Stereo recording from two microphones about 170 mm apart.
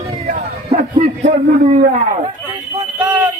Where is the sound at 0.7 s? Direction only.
45° right (ahead or behind).